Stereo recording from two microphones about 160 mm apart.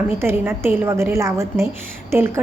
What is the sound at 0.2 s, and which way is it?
A woman's voice, 15° right (ahead or behind).